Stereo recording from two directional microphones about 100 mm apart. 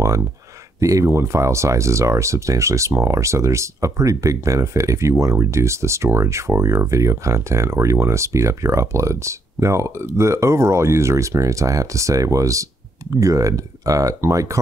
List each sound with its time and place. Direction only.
0.7 s speech: 35° right (ahead or behind)